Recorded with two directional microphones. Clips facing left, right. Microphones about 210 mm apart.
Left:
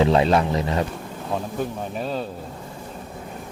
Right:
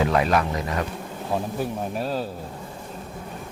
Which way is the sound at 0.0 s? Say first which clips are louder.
Left 3 dB; 25° left (ahead or behind).